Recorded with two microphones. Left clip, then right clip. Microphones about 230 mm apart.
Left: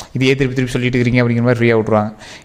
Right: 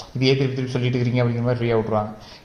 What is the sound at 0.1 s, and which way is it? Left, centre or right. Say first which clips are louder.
A man's voice: left 5 dB; left.